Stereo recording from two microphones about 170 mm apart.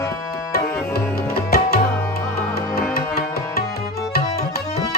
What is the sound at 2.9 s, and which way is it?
Music, 60° left (ahead or behind).